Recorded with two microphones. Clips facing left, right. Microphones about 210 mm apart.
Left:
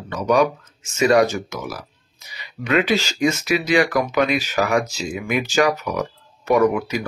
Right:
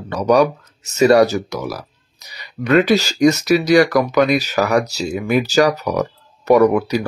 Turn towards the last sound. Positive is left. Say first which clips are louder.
# right 5 dB
turn(degrees=-40)  # may be behind; listen again after turning